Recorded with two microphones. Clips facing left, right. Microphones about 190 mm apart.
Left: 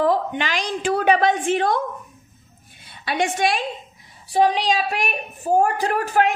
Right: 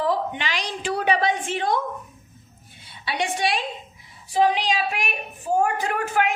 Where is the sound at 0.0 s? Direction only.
50° left (ahead or behind).